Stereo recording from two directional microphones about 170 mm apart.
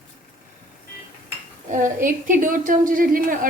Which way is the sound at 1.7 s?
50° right (ahead or behind).